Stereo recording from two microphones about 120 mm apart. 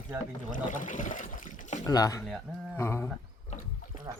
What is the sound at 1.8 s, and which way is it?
Speech, 30° left (ahead or behind).